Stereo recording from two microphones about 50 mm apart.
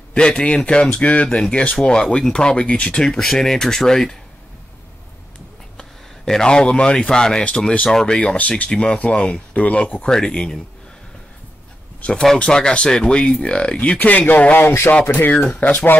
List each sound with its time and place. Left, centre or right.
0.1 s speech: centre
5.8 s speech: centre
8.2 s speech: left
10.0 s speech: centre
12.4 s speech: centre
13.9 s speech: left
15.6 s speech: left